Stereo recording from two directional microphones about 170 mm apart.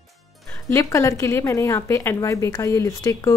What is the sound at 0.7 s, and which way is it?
A woman's voice, 20° left (ahead or behind).